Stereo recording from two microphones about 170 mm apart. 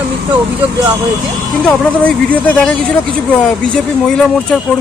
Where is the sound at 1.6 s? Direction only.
10° left (ahead or behind).